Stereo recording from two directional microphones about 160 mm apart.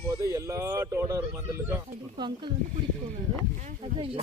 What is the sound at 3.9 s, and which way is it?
Speech, 35° right (ahead or behind).